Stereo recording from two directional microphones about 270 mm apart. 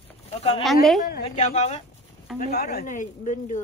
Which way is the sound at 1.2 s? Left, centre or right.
Left.